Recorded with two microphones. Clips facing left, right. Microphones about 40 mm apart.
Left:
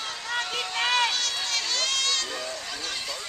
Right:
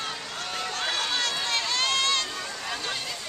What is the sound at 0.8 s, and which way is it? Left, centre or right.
Run, left.